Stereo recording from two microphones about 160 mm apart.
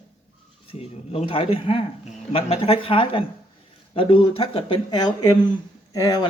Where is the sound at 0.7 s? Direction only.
40° left (ahead or behind).